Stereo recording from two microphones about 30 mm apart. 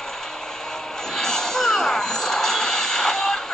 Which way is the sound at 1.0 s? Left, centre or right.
Centre.